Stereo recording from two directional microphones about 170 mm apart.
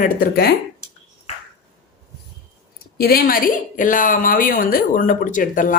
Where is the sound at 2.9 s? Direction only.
60° left (ahead or behind).